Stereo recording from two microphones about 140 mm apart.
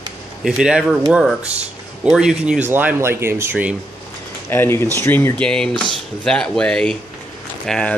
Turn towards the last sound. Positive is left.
turn(degrees=5)  # may be behind; listen again after turning